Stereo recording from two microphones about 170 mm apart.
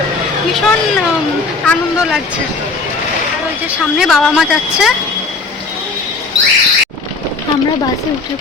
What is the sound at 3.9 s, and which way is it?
Speech, centre (ahead or behind).